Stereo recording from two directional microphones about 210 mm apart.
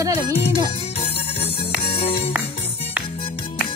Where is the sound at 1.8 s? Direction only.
25° left (ahead or behind).